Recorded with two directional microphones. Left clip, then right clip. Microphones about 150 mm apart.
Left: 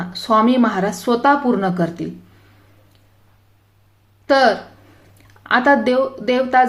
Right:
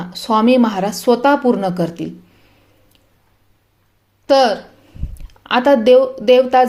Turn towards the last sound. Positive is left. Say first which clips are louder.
# right 5 dB
turn(degrees=-30)  # may be behind; listen again after turning